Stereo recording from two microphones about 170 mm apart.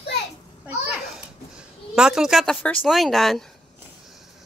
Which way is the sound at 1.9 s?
5° right (ahead or behind).